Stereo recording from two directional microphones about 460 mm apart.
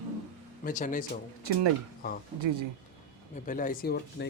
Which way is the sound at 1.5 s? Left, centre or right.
Right.